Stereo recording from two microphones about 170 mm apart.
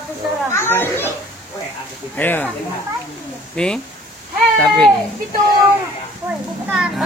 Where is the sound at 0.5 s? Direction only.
15° left (ahead or behind).